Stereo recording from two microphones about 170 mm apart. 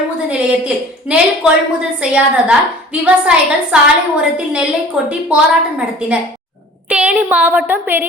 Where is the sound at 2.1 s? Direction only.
5° right (ahead or behind).